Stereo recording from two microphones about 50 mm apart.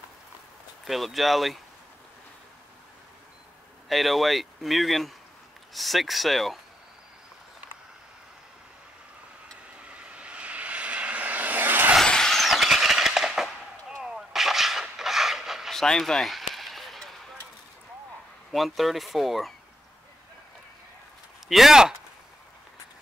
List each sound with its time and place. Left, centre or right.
0.8 s speech: centre
3.9 s speech: centre
9.8 s vehicle: right
12.0 s squeal: centre
14.0 s artillery fire: centre
15.7 s speech: centre
16.3 s a sound: centre
18.5 s speech: centre
21.5 s speech: centre